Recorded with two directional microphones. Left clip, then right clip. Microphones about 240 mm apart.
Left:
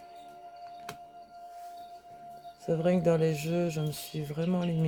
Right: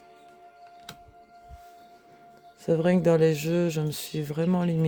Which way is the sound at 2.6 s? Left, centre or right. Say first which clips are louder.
Right 4 dB; right.